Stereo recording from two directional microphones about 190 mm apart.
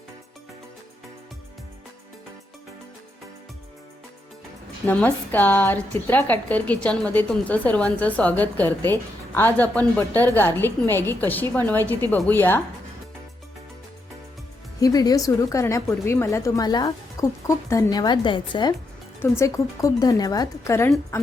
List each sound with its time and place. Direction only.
4.9 s a woman's voice: 10° left (ahead or behind)
14.8 s a woman's voice: 20° left (ahead or behind)